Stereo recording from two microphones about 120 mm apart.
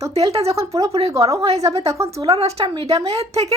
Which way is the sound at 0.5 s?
25° right (ahead or behind).